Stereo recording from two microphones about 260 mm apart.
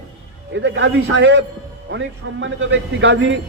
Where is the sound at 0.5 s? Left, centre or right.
Right.